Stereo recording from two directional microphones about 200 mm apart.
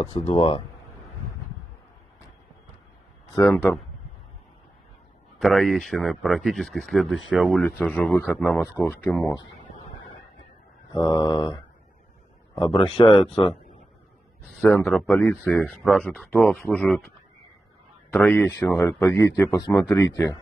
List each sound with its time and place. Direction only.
0.0 s mantra: 25° left (ahead or behind)
3.3 s speech: 10° left (ahead or behind)
5.4 s speech: centre (ahead or behind)
9.2 s a sound: 20° left (ahead or behind)
10.9 s mantra: 20° left (ahead or behind)
14.5 s speech: centre (ahead or behind)
18.1 s speech: 10° left (ahead or behind)